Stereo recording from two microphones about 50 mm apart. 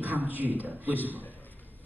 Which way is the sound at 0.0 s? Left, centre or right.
Right.